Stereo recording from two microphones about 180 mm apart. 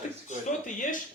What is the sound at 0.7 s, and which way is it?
Speech, 45° left (ahead or behind).